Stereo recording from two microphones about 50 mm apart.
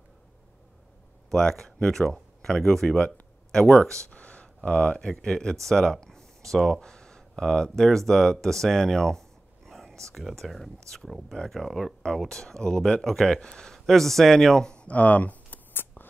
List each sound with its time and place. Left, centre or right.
1.3 s speech: centre
4.1 s a sound: left
4.6 s speech: centre